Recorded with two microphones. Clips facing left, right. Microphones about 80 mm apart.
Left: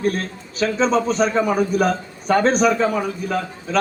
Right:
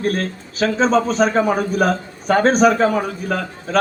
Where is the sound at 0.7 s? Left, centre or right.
Right.